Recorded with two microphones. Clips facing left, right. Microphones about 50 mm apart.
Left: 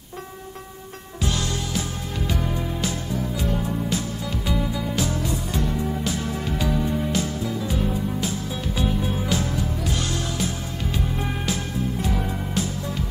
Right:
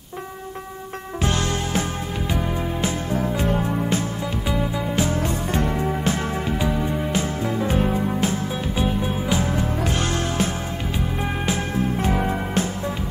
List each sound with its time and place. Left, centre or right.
1.2 s music: right
2.2 s music: centre
3.1 s music: right
4.5 s music: right
5.2 s music: right
6.5 s music: right
7.4 s music: right
8.7 s music: right
9.5 s music: right
11.1 s music: right
11.7 s music: right